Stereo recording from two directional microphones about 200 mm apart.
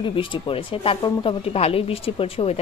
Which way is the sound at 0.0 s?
25° left (ahead or behind).